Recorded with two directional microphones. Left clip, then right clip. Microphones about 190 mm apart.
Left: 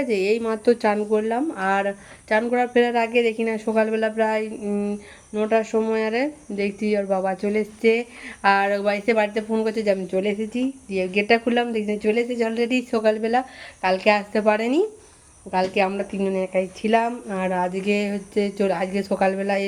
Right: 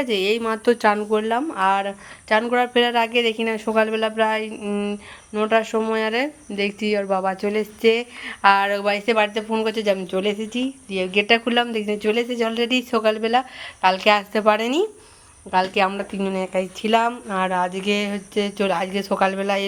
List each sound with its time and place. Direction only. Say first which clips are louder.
0.0 s speech: right 1 dB; centre (ahead or behind)